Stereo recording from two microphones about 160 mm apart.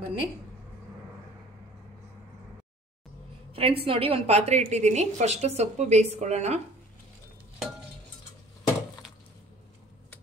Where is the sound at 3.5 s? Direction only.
35° right (ahead or behind).